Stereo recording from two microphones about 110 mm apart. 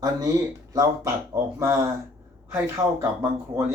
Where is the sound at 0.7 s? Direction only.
30° right (ahead or behind).